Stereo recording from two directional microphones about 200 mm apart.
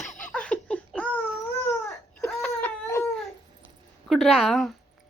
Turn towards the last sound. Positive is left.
turn(degrees=0)  # may be behind; listen again after turning